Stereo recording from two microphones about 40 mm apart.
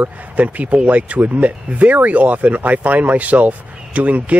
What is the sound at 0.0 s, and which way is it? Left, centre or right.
Speech, right.